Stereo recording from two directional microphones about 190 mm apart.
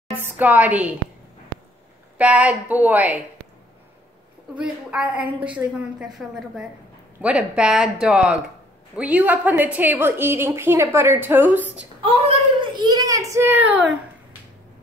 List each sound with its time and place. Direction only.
0.2 s a woman's voice: 10° right (ahead or behind)
2.1 s a woman's voice: 5° right (ahead or behind)
4.6 s a woman's voice: 5° right (ahead or behind)
11.7 s a child's voice: 30° right (ahead or behind); by 13.8 s 10° right (ahead or behind)